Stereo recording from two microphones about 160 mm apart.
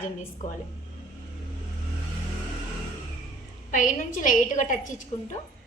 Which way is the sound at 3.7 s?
55° left (ahead or behind).